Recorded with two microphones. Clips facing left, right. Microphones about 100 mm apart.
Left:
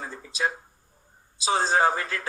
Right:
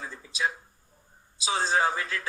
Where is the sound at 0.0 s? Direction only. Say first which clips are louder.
Left 2 dB; 45° left (ahead or behind).